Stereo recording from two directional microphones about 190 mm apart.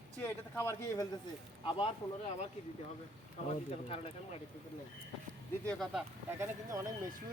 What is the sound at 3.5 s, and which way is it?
Speech, 30° left (ahead or behind).